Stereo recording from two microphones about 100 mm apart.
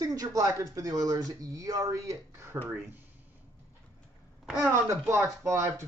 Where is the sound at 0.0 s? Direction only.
40° right (ahead or behind); by 3.0 s 20° right (ahead or behind).